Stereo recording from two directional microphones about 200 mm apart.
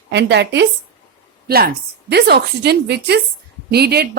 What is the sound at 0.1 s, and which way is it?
Speech, 60° right (ahead or behind).